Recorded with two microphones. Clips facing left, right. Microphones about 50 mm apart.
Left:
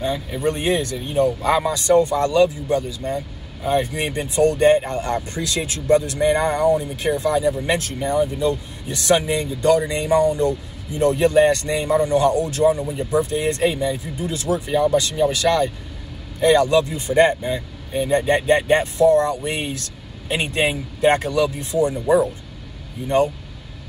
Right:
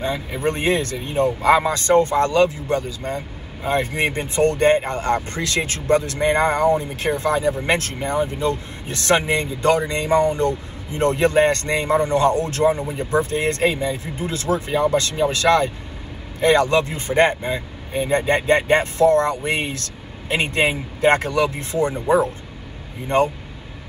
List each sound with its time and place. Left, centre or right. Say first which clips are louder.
0.0 s speech: left 1 dB; right